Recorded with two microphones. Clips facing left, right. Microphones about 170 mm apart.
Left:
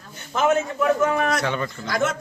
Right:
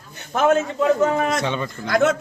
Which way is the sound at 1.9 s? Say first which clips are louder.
Right 6 dB; 60° right (ahead or behind).